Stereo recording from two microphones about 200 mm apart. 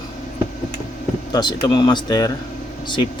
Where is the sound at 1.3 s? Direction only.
20° left (ahead or behind).